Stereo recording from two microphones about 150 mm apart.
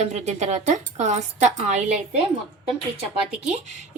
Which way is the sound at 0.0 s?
45° right (ahead or behind).